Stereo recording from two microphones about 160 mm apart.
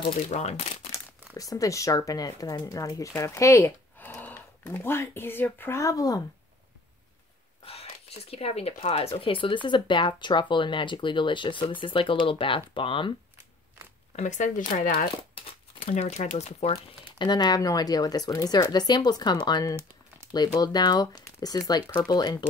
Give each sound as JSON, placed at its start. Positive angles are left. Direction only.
{"t": 0.3, "sound": "speech", "side_deg": 45}
{"t": 1.3, "sound": "speech", "side_deg": 20}
{"t": 7.6, "sound": "speech", "side_deg": 40}
{"t": 14.1, "sound": "speech", "side_deg": 50}
{"t": 15.8, "sound": "speech", "side_deg": 50}